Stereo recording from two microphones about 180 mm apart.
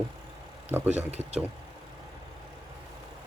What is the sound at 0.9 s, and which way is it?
Speech, 35° right (ahead or behind).